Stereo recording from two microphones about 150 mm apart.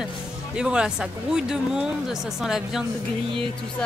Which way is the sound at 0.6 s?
5° right (ahead or behind).